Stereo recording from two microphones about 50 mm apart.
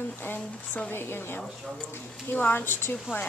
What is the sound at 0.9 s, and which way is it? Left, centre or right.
Speech, left.